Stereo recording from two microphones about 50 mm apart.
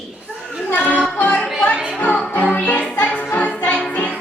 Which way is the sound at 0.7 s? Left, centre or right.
Left.